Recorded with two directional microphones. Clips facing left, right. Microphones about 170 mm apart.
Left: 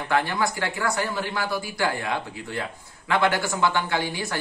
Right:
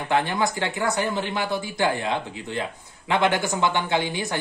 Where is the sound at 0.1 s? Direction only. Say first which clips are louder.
Right 1 dB; 20° right (ahead or behind).